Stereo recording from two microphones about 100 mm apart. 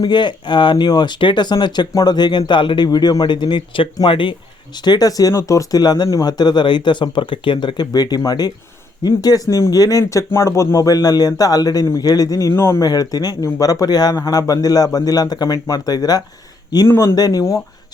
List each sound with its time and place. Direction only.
0.0 s speech: 50° left (ahead or behind)
4.8 s speech: 40° left (ahead or behind); by 12.8 s 25° left (ahead or behind)
12.8 s speech: 40° left (ahead or behind)
16.8 s speech: 25° left (ahead or behind)
17.2 s speech: 40° left (ahead or behind)